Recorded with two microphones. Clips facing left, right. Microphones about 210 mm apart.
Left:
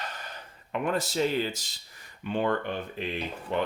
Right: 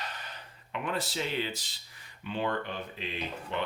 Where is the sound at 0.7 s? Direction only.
45° left (ahead or behind).